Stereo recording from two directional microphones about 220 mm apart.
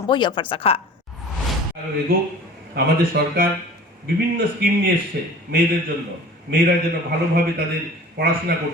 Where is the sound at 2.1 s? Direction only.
45° right (ahead or behind).